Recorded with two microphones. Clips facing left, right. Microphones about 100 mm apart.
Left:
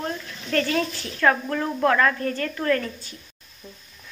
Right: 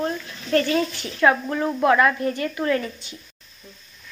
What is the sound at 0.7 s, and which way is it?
A woman's voice, 15° right (ahead or behind).